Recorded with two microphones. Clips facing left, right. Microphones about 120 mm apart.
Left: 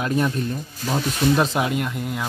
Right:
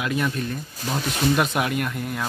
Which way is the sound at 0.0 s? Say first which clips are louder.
Left 3 dB; 35° left (ahead or behind).